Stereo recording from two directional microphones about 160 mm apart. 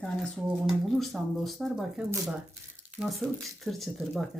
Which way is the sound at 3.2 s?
5° left (ahead or behind).